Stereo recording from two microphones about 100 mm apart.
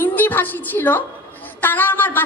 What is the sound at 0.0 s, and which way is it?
A woman's voice, 20° left (ahead or behind).